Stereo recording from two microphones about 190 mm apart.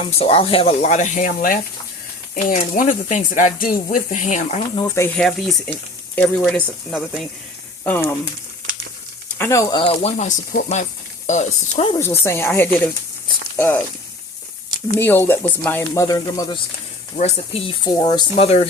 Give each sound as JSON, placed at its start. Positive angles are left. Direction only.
{"t": 0.0, "sound": "speech", "side_deg": 30}
{"t": 4.7, "sound": "speech", "side_deg": 15}
{"t": 9.4, "sound": "speech", "side_deg": 15}
{"t": 11.9, "sound": "speech", "side_deg": 15}
{"t": 14.9, "sound": "speech", "side_deg": 10}
{"t": 17.2, "sound": "speech", "side_deg": 35}
{"t": 17.8, "sound": "speech", "side_deg": 20}